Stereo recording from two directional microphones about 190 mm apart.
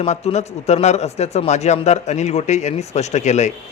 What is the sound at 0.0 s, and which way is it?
A man's voice, 35° left (ahead or behind).